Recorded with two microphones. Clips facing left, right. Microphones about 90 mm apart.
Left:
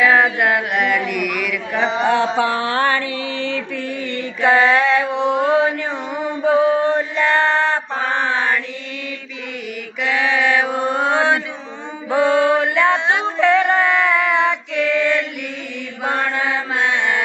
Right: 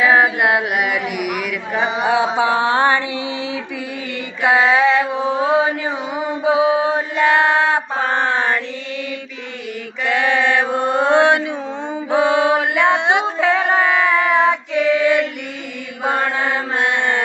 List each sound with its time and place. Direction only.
0.0 s mantra: 10° right (ahead or behind)
10.9 s mantra: 15° right (ahead or behind)
13.4 s child singing: 5° right (ahead or behind)
16.0 s mantra: 5° right (ahead or behind)